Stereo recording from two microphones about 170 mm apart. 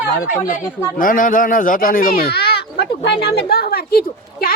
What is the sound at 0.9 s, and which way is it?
A woman's voice, 55° left (ahead or behind).